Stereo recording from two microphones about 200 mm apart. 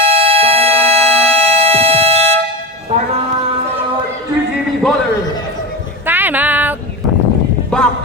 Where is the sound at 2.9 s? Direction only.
30° right (ahead or behind).